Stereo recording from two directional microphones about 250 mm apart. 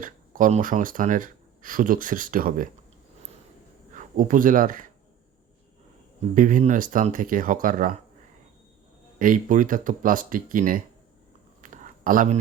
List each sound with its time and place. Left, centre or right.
0.0 s speech: right
3.9 s speech: right
6.3 s speech: right
9.1 s speech: right
11.6 s a sound: right